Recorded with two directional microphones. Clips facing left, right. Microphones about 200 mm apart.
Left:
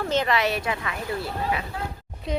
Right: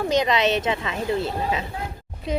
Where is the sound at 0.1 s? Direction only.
15° right (ahead or behind).